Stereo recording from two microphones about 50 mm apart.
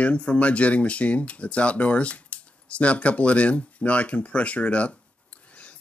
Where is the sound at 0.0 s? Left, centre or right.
Left.